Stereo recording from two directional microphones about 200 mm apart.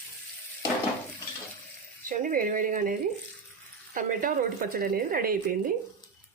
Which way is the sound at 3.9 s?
45° right (ahead or behind).